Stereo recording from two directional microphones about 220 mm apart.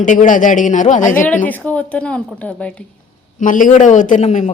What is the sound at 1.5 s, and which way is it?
A woman's voice, 5° left (ahead or behind).